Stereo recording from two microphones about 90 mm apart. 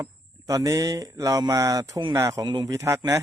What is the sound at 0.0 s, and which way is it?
Speech, 40° right (ahead or behind).